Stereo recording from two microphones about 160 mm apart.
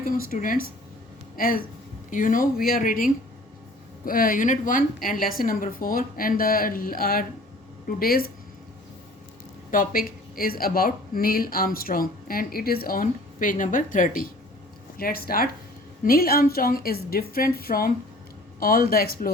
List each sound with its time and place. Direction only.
0.0 s speech: 60° left (ahead or behind)
2.0 s a woman's voice: 55° left (ahead or behind)
9.7 s a woman's voice: 60° left (ahead or behind)